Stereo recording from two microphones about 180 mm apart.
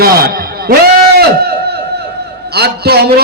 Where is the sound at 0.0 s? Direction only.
55° right (ahead or behind).